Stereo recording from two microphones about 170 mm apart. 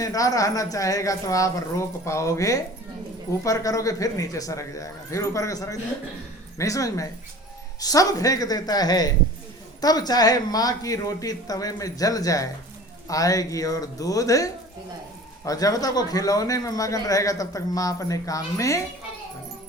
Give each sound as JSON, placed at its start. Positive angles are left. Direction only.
{"t": 0.0, "sound": "a man's voice", "side_deg": 20}